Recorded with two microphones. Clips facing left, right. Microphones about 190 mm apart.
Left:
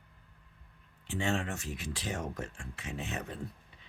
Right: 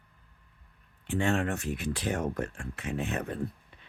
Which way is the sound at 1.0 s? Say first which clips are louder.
Right 5 dB; 55° right (ahead or behind).